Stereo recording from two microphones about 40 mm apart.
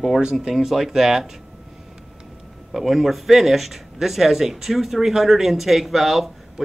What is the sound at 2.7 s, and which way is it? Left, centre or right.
Speech, centre.